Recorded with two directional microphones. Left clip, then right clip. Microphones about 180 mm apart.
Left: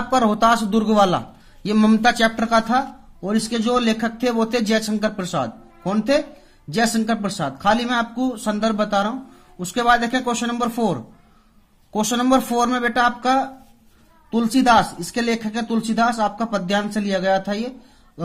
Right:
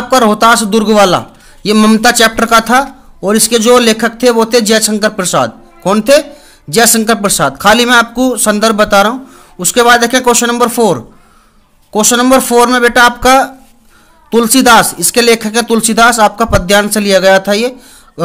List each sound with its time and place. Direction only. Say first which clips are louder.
0.1 s a man's voice: right 10 dB; 20° right (ahead or behind)